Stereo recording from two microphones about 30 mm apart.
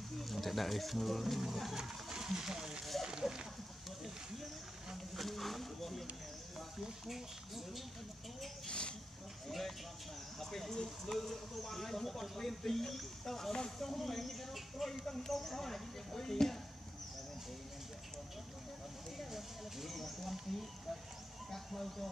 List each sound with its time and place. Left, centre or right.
0.2 s speech: centre
1.8 s speech: centre
2.8 s speech: centre
3.1 s speech: right
4.9 s speech: centre
7.1 s speech: centre
8.6 s a sound: left
9.5 s speech: centre
19.3 s a sound: centre
21.5 s speech: centre